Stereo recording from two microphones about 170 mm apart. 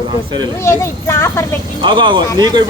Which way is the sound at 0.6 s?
15° left (ahead or behind).